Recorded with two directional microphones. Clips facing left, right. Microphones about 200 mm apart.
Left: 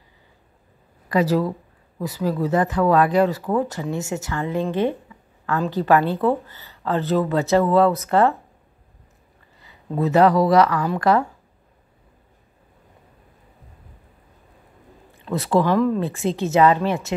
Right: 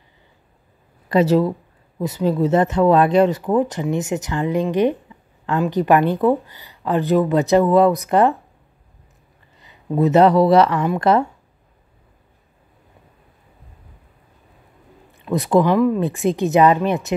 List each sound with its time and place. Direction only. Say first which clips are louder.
1.0 s speech: right 4 dB; 25° right (ahead or behind)
9.6 s speech: right 5 dB; 20° right (ahead or behind)
15.2 s speech: right 3 dB; 15° right (ahead or behind)